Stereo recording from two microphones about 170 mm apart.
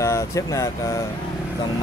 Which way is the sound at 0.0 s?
15° left (ahead or behind).